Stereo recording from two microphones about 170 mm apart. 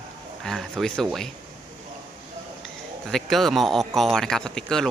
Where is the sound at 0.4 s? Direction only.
5° left (ahead or behind).